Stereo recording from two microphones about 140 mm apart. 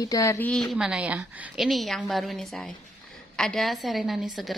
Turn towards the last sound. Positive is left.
turn(degrees=0)  # may be behind; listen again after turning